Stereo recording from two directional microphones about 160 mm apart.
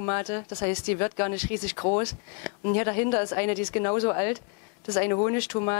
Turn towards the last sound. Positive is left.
turn(degrees=15)  # may be behind; listen again after turning